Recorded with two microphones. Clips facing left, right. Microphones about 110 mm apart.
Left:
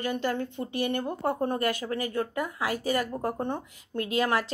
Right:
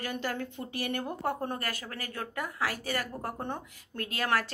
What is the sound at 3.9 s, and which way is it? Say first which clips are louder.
Speech: left 9 dB; 50° right (ahead or behind).